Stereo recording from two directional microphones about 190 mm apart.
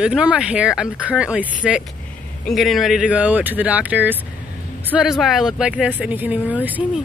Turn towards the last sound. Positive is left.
turn(degrees=-10)  # may be behind; listen again after turning